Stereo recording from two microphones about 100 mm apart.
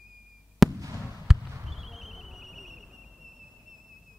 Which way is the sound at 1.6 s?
Centre (ahead or behind).